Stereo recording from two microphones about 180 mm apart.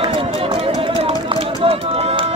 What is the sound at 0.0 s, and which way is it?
Run, 30° right (ahead or behind).